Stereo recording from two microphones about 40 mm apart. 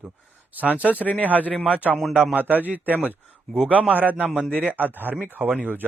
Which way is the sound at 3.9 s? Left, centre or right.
Right.